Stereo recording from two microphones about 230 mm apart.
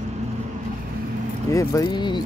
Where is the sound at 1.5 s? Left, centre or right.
Centre.